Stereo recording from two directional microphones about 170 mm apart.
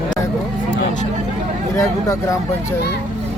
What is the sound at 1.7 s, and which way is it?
Speech, 20° left (ahead or behind).